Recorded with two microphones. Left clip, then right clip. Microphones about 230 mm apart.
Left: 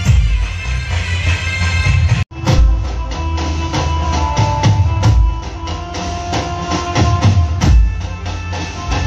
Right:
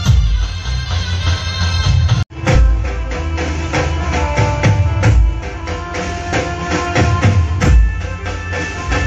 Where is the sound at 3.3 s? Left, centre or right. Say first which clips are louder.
Right 2 dB; left.